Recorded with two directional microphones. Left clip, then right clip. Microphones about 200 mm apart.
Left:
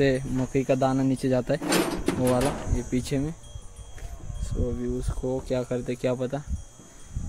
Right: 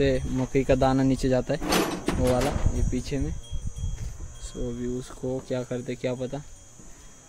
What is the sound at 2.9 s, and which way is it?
Speech, 25° left (ahead or behind).